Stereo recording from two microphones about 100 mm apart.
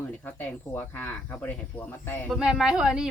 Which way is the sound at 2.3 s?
5° right (ahead or behind).